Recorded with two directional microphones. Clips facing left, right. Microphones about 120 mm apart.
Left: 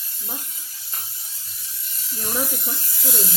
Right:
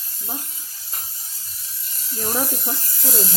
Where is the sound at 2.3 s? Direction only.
35° right (ahead or behind).